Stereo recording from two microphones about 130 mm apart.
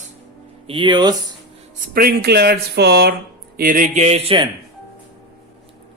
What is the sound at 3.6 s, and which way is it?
Speech, 90° right.